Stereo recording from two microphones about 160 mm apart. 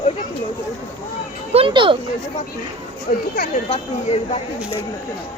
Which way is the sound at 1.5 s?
35° right (ahead or behind).